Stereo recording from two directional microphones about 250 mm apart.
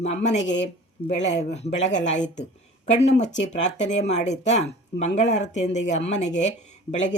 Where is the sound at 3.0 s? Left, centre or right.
Left.